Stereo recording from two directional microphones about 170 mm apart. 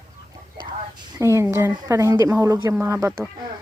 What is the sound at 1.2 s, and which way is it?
A woman's voice, 15° right (ahead or behind).